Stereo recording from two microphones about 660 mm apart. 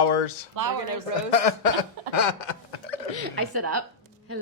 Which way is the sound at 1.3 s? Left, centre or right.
Left.